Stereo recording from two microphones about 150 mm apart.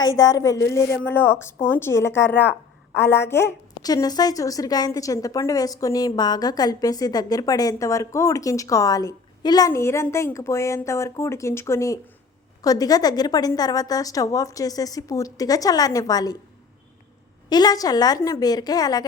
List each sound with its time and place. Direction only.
0.0 s a woman's voice: 25° left (ahead or behind)
17.5 s a woman's voice: 25° left (ahead or behind)